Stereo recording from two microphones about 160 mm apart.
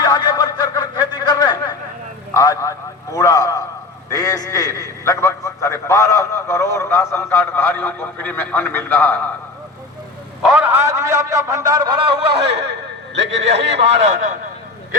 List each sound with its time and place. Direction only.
0.0 s a sound: 25° left (ahead or behind)
5.0 s a man's voice: 20° left (ahead or behind)
10.4 s a man's voice: 5° right (ahead or behind); by 12.3 s 35° right (ahead or behind)
13.7 s a man's voice: 45° right (ahead or behind)